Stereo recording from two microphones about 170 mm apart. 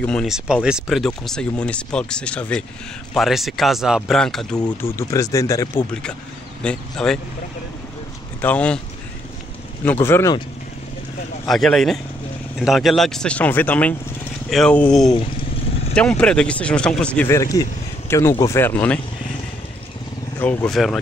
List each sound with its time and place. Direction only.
0.0 s speech: 5° left (ahead or behind)
4.6 s speech: 20° left (ahead or behind)
6.6 s speech: 5° left (ahead or behind)
8.4 s speech: 10° left (ahead or behind)
10.0 s speech: 15° left (ahead or behind)
11.4 s speech: centre (ahead or behind)
20.3 s speech: 5° left (ahead or behind)